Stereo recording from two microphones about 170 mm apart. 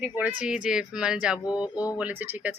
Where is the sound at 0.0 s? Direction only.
10° right (ahead or behind).